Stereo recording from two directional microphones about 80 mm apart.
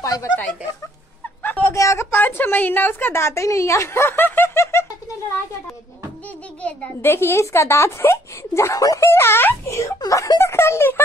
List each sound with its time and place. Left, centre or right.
0.0 s speech: left
1.4 s a sound: left
1.7 s a woman's voice: left
2.1 s a woman's voice: left
7.0 s a woman's voice: left
9.9 s a woman's voice: left